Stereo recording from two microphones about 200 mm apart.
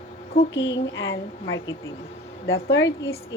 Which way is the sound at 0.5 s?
70° left (ahead or behind).